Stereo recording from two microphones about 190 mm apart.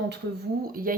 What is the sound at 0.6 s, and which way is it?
Speech, 50° right (ahead or behind).